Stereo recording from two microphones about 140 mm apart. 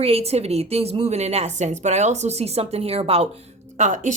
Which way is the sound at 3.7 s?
60° right (ahead or behind).